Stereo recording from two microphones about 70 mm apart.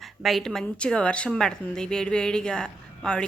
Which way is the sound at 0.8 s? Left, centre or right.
Centre.